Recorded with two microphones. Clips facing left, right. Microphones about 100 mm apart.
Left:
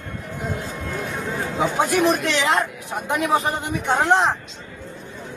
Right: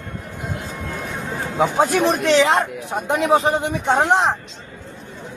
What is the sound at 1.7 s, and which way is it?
Speech, 30° right (ahead or behind).